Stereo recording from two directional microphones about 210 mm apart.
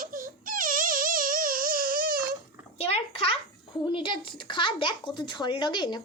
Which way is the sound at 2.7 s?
30° left (ahead or behind).